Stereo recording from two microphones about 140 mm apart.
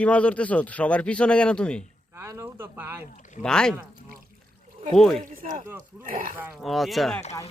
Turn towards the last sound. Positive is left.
turn(degrees=0)  # may be behind; listen again after turning